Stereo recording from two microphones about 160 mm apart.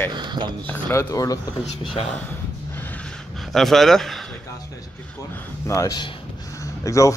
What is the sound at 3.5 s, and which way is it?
Speech, centre (ahead or behind).